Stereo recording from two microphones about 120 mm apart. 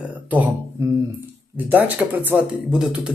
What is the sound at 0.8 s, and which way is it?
Speech, 20° right (ahead or behind).